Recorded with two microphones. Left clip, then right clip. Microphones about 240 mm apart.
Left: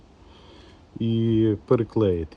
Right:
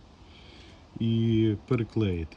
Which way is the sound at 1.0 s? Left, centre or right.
Left.